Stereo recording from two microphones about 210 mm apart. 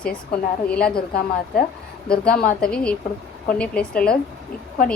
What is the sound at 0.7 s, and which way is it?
Speech, 5° left (ahead or behind).